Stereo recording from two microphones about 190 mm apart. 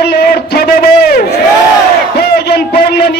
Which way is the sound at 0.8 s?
55° left (ahead or behind).